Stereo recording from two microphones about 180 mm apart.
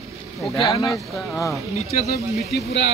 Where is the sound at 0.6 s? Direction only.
Centre (ahead or behind).